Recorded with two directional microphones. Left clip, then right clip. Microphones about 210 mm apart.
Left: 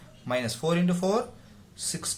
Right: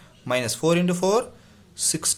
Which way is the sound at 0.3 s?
40° right (ahead or behind).